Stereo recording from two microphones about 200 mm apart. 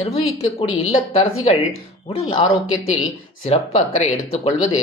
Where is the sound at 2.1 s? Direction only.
30° left (ahead or behind).